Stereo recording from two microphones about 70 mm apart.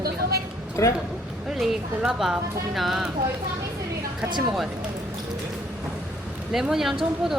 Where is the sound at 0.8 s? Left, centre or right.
Left.